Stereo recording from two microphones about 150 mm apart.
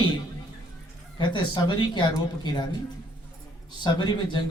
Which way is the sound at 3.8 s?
30° left (ahead or behind).